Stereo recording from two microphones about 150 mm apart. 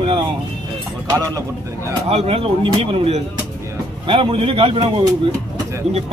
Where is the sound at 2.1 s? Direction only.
40° right (ahead or behind).